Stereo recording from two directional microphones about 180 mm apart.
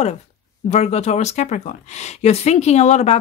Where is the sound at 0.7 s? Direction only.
35° left (ahead or behind).